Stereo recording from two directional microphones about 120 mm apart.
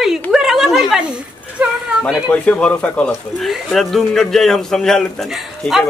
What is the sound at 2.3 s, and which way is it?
A man's voice, 10° left (ahead or behind).